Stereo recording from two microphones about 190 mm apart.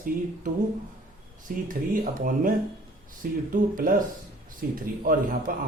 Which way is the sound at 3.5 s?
45° right (ahead or behind).